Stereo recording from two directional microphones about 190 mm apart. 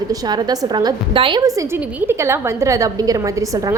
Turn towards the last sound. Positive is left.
turn(degrees=-15)  # may be behind; listen again after turning